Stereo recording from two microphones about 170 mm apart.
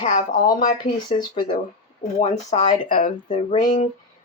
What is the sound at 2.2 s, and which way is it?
Speech, 40° left (ahead or behind).